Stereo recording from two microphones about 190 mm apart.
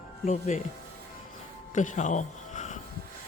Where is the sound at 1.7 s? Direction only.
40° left (ahead or behind).